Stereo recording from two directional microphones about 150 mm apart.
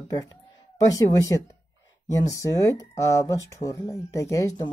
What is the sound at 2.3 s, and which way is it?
Speech, 20° left (ahead or behind).